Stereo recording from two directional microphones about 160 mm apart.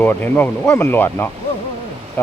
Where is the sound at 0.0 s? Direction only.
10° left (ahead or behind).